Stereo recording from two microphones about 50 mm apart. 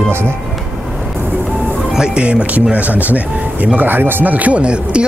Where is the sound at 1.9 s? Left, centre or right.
Centre.